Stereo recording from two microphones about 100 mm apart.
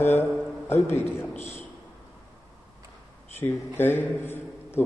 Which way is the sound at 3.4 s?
20° left (ahead or behind).